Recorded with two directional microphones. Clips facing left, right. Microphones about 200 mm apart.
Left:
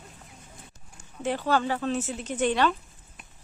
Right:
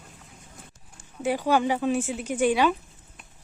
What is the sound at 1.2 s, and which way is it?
Speech, 10° right (ahead or behind).